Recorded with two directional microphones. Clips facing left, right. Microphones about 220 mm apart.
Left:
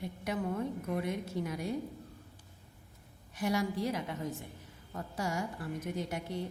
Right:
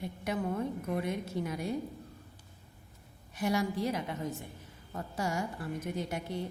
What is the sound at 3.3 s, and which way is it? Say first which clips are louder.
Speech: right 1 dB; 25° right (ahead or behind).